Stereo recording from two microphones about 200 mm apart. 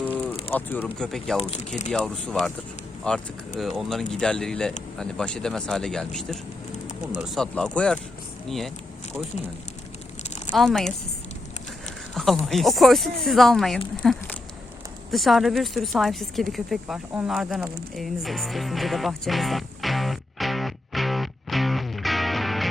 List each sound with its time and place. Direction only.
0.5 s speech: 10° left (ahead or behind)
1.4 s speech: 30° left (ahead or behind)
1.9 s speech: centre (ahead or behind)
10.5 s speech: centre (ahead or behind)
12.1 s a sound: centre (ahead or behind)
12.5 s speech: centre (ahead or behind)
15.1 s a sound: centre (ahead or behind)